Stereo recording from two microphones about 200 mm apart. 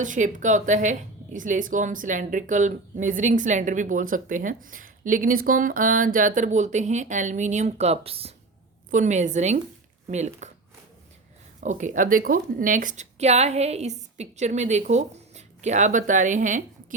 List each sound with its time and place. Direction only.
0.0 s speech: 40° right (ahead or behind)
11.6 s speech: 40° right (ahead or behind)